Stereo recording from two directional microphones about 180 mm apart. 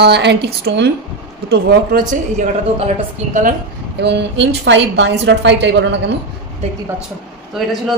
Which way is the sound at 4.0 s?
70° right (ahead or behind).